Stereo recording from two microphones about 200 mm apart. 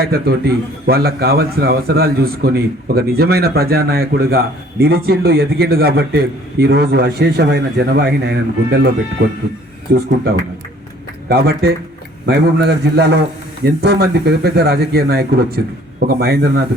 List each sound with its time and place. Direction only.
0.0 s a man's voice: 50° right (ahead or behind)
9.9 s a man's voice: 45° right (ahead or behind)
11.3 s a man's voice: 50° right (ahead or behind)